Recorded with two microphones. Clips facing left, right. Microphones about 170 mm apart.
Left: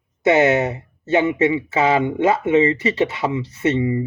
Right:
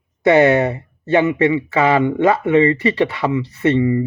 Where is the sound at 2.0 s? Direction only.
20° left (ahead or behind).